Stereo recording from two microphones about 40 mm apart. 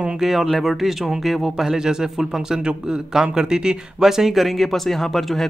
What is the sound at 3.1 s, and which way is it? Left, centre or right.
Speech, centre.